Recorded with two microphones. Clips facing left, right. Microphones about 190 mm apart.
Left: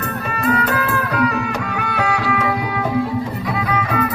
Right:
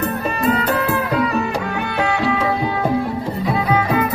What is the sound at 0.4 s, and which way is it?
Music, 25° right (ahead or behind).